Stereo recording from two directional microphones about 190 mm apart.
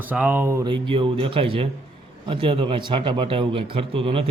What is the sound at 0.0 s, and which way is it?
A man's voice, 10° right (ahead or behind).